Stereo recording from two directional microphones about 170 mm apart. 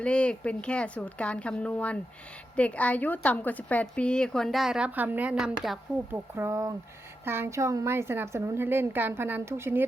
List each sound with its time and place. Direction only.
0.0 s a woman's voice: 5° left (ahead or behind)
6.3 s a woman's voice: 15° right (ahead or behind)